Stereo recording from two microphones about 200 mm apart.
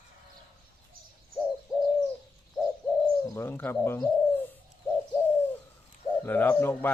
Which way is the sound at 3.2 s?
10° left (ahead or behind).